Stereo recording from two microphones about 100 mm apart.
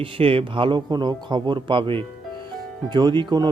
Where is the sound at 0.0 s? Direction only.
65° right (ahead or behind).